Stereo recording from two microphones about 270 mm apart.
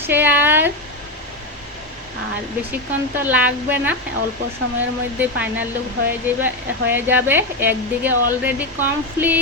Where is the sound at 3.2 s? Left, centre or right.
Centre.